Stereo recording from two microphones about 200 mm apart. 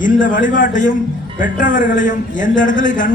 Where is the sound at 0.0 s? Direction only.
40° left (ahead or behind).